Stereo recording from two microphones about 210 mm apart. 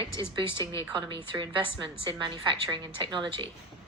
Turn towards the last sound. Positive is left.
turn(degrees=-25)  # may be behind; listen again after turning